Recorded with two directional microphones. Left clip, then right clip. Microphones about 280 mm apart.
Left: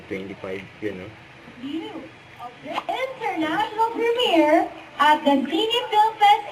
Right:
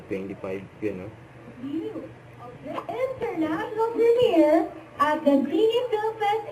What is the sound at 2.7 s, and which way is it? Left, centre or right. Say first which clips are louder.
A woman's voice: left 2 dB; centre.